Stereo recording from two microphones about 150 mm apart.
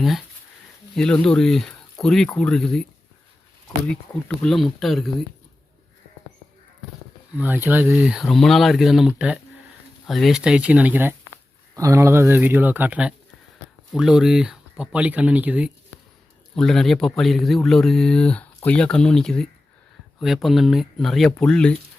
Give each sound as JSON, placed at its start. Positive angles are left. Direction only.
{"t": 0.9, "sound": "speech", "side_deg": 5}
{"t": 3.8, "sound": "speech", "side_deg": 5}
{"t": 7.3, "sound": "speech", "side_deg": -10}
{"t": 16.6, "sound": "speech", "side_deg": 5}